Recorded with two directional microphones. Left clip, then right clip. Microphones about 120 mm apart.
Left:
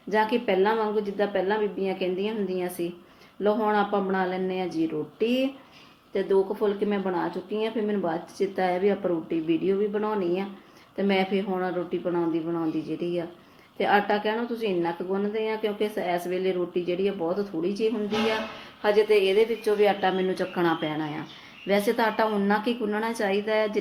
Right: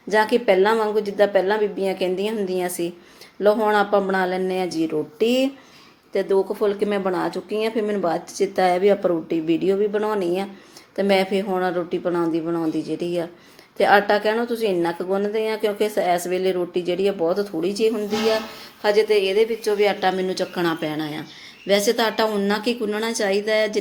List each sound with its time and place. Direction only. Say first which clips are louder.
0.1 s a woman's voice: right 6 dB; 30° right (ahead or behind)